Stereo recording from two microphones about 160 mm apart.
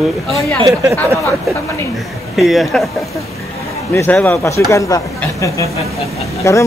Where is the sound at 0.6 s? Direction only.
20° right (ahead or behind).